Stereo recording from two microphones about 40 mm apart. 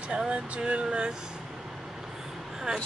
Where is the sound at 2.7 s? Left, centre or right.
Right.